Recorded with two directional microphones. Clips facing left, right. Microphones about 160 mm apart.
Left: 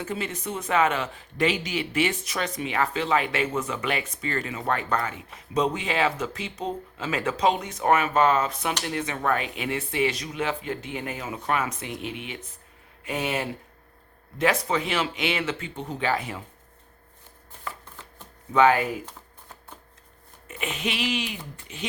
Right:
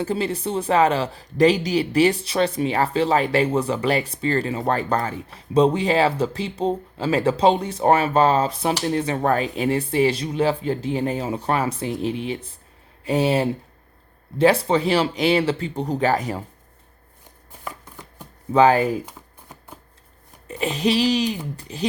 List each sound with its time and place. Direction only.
0.0 s speech: 35° right (ahead or behind)
17.7 s shuffling cards: 10° right (ahead or behind)
18.5 s speech: 35° right (ahead or behind)
19.0 s shuffling cards: 10° right (ahead or behind)
20.5 s speech: 35° right (ahead or behind)